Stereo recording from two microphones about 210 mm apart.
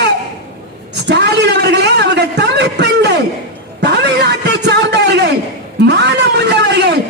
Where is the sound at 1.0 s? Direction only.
55° right (ahead or behind).